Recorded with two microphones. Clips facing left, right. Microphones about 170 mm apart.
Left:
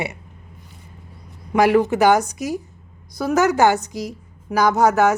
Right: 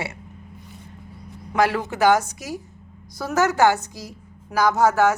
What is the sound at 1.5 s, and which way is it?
A woman's voice, 15° left (ahead or behind).